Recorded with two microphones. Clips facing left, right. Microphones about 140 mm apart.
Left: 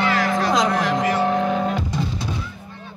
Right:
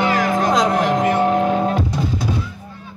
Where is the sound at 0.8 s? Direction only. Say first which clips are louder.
Right 3 dB; 50° right (ahead or behind).